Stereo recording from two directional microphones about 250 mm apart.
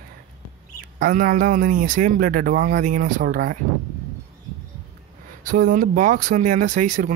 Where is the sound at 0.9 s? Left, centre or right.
Right.